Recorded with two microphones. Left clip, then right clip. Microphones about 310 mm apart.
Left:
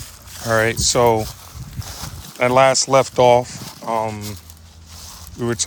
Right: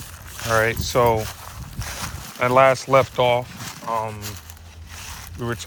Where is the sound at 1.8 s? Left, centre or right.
Centre.